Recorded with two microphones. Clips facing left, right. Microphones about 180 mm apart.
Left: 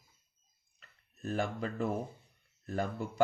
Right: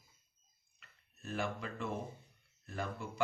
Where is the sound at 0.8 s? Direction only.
40° left (ahead or behind).